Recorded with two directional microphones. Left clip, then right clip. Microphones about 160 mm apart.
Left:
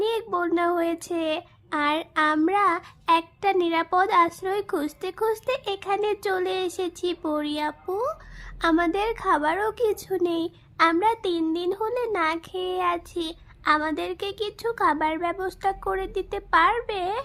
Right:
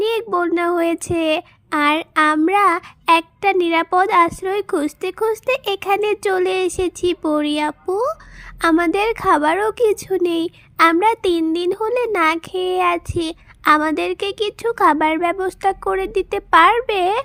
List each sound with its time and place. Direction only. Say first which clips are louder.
0.0 s speech: right 6 dB; 25° right (ahead or behind)